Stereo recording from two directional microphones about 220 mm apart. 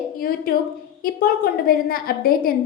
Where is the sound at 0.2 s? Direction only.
40° left (ahead or behind).